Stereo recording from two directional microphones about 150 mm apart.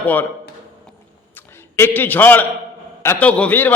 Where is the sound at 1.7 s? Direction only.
15° left (ahead or behind).